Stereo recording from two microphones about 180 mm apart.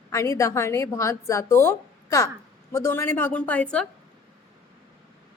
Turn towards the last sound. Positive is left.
turn(degrees=5)  # may be behind; listen again after turning